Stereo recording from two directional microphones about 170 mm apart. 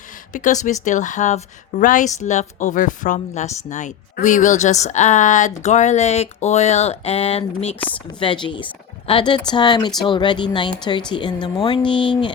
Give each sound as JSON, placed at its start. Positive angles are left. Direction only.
{"t": 0.3, "sound": "a woman's voice", "side_deg": 45}
{"t": 7.8, "sound": "speech", "side_deg": 10}
{"t": 8.2, "sound": "speech", "side_deg": 30}